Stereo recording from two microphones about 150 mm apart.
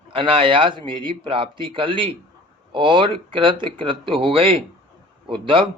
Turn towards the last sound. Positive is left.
turn(degrees=-35)  # may be behind; listen again after turning